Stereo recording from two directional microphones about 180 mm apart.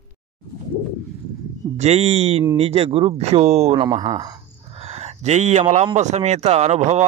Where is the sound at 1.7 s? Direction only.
35° right (ahead or behind).